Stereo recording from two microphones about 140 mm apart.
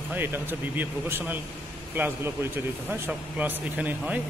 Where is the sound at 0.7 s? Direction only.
15° right (ahead or behind).